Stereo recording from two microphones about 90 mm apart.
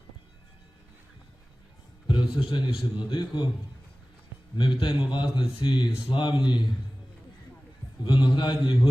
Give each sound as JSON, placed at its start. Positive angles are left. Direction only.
{"t": 2.1, "sound": "speech", "side_deg": 65}
{"t": 4.5, "sound": "speech", "side_deg": 60}
{"t": 8.0, "sound": "speech", "side_deg": 60}